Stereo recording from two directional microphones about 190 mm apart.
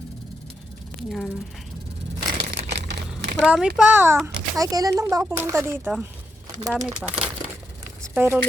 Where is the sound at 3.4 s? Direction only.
5° right (ahead or behind).